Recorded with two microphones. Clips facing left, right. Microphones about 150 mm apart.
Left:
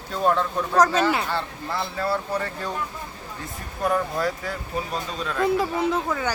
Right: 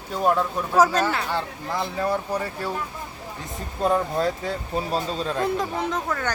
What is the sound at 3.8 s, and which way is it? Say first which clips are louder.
Speech: right 2 dB; 25° right (ahead or behind).